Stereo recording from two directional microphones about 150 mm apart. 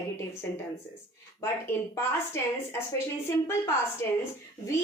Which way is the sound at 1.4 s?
15° left (ahead or behind).